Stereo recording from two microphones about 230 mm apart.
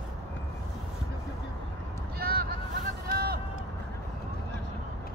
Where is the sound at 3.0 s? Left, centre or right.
Right.